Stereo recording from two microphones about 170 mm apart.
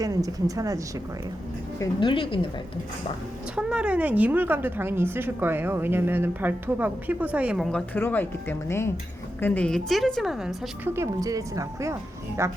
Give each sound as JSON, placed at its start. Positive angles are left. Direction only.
{"t": 0.0, "sound": "a woman's voice", "side_deg": -20}
{"t": 1.8, "sound": "a woman's voice", "side_deg": 30}
{"t": 3.5, "sound": "a woman's voice", "side_deg": -5}
{"t": 10.9, "sound": "a woman's voice", "side_deg": -20}